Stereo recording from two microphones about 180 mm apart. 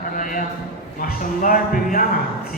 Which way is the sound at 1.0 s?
50° left (ahead or behind).